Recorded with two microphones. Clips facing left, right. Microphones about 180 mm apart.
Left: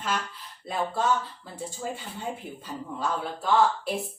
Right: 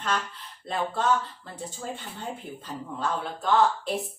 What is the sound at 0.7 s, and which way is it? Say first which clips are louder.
Speech: right 1 dB; 10° left (ahead or behind).